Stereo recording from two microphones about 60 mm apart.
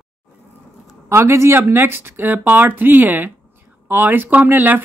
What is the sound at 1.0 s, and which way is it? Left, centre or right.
Speech, right.